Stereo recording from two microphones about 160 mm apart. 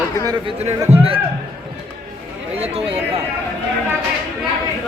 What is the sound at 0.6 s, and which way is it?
Speech, 40° right (ahead or behind).